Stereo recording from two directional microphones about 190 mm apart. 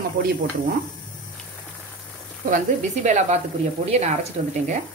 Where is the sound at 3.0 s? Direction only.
40° right (ahead or behind).